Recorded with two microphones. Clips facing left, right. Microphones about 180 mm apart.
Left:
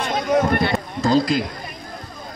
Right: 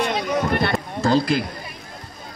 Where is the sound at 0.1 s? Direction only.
50° left (ahead or behind).